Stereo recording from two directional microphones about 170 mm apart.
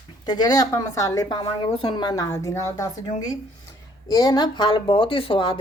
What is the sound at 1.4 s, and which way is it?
Speech, 35° left (ahead or behind).